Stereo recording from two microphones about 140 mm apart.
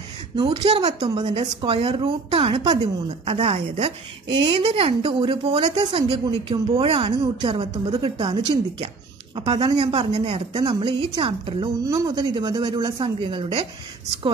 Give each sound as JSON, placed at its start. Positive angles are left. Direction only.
{"t": 0.4, "sound": "speech", "side_deg": -40}
{"t": 0.9, "sound": "a woman's voice", "side_deg": -30}
{"t": 1.2, "sound": "a woman's voice", "side_deg": -50}
{"t": 11.8, "sound": "speech", "side_deg": -25}